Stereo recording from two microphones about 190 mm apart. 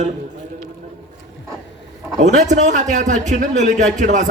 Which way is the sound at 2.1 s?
40° right (ahead or behind).